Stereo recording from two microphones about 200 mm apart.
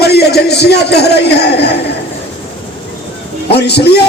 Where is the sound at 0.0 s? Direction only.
55° left (ahead or behind).